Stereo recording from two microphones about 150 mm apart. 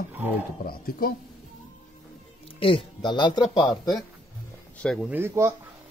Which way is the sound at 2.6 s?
35° left (ahead or behind).